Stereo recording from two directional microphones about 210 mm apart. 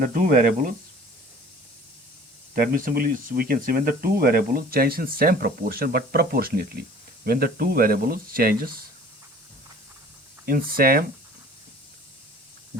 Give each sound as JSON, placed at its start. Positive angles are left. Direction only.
{"t": 0.0, "sound": "speech", "side_deg": -40}
{"t": 2.6, "sound": "speech", "side_deg": -40}
{"t": 10.4, "sound": "speech", "side_deg": -45}